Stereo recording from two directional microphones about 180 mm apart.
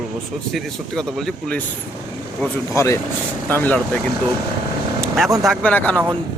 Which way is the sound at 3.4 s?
10° left (ahead or behind).